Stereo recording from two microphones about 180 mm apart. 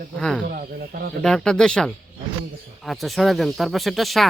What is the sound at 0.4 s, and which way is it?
Speech, 55° right (ahead or behind).